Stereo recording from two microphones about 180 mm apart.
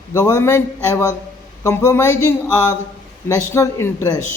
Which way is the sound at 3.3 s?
15° left (ahead or behind).